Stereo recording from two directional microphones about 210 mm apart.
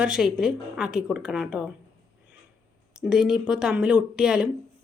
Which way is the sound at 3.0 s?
5° right (ahead or behind).